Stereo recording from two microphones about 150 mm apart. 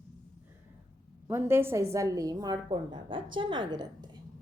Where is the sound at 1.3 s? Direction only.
15° right (ahead or behind).